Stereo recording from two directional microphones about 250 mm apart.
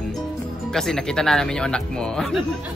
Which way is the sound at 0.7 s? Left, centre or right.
Centre.